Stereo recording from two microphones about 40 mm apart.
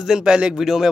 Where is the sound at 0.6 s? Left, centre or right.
Centre.